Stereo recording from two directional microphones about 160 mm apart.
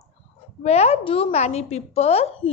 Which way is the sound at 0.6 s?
40° left (ahead or behind).